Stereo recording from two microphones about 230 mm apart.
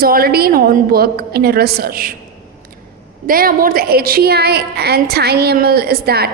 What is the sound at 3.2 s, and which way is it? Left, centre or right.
A woman's voice, right.